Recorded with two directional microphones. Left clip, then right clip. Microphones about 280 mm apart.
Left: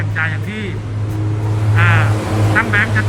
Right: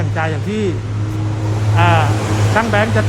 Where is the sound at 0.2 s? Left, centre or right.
Centre.